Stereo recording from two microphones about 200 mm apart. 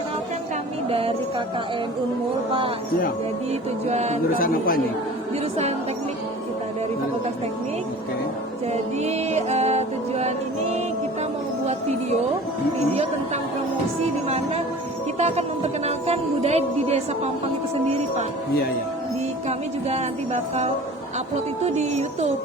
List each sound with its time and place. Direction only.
0.9 s music: 30° right (ahead or behind)
2.5 s speech: 25° right (ahead or behind)
4.4 s speech: 45° left (ahead or behind)
8.7 s speech: 35° right (ahead or behind)
12.9 s speech: 35° right (ahead or behind)
19.5 s speech: 35° right (ahead or behind)
21.8 s speech: 35° right (ahead or behind)